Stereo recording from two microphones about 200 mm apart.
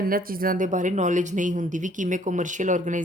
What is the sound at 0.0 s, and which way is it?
A woman's voice, 45° right (ahead or behind).